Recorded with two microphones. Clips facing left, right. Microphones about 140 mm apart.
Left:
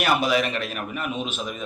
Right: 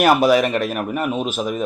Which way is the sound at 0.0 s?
45° right (ahead or behind).